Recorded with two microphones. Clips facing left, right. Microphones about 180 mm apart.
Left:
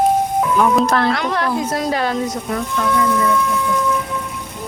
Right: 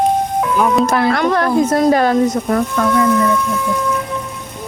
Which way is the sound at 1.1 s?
50° right (ahead or behind).